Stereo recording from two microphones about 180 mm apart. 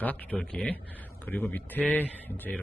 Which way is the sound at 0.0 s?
10° left (ahead or behind).